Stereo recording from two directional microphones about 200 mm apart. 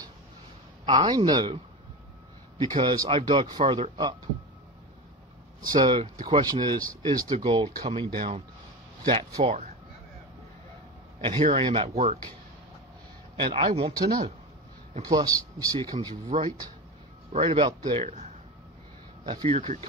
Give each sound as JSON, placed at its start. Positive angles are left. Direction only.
{"t": 0.8, "sound": "a man's voice", "side_deg": -25}
{"t": 2.6, "sound": "a man's voice", "side_deg": -25}
{"t": 5.7, "sound": "a man's voice", "side_deg": -20}
{"t": 9.0, "sound": "a man's voice", "side_deg": -30}
{"t": 11.1, "sound": "speech", "side_deg": -30}
{"t": 13.4, "sound": "a man's voice", "side_deg": -25}
{"t": 16.3, "sound": "a man's voice", "side_deg": -35}